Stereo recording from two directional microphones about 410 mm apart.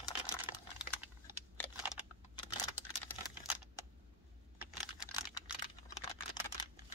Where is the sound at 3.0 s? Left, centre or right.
Centre.